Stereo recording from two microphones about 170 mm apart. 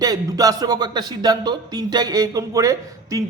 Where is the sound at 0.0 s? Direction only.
20° right (ahead or behind).